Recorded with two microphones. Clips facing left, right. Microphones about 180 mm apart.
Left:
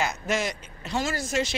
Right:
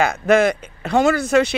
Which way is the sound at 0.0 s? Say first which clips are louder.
Right 12 dB; 60° right (ahead or behind).